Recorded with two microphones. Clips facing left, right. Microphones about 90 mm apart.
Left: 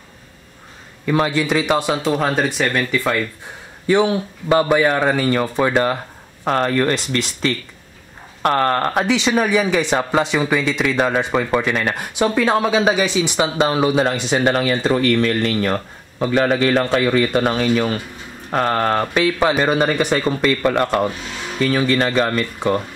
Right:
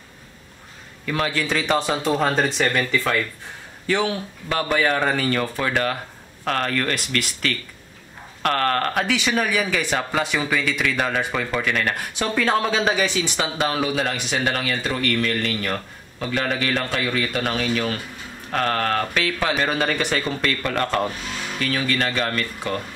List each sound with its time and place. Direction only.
1.0 s speech: 20° left (ahead or behind); by 3.0 s centre (ahead or behind)
3.8 s speech: 15° left (ahead or behind)